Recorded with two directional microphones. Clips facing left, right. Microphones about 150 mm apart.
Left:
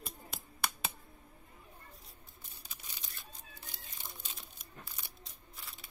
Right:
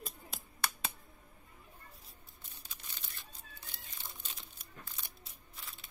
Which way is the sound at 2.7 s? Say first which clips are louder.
Even; 10° left (ahead or behind).